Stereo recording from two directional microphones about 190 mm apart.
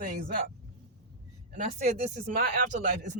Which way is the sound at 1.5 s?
40° right (ahead or behind).